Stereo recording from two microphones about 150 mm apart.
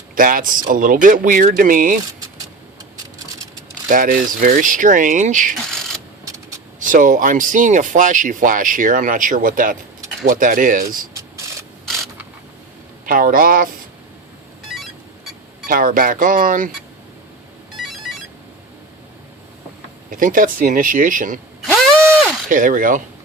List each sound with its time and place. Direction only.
0.2 s speech: 70° right (ahead or behind)
3.8 s speech: 65° right (ahead or behind)
6.7 s speech: 60° right (ahead or behind)
13.1 s speech: 70° right (ahead or behind)
15.6 s speech: 70° right (ahead or behind)
20.1 s speech: 65° right (ahead or behind)
22.4 s speech: 65° right (ahead or behind)